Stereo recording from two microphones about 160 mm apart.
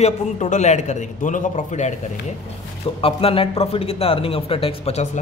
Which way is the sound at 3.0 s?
35° left (ahead or behind).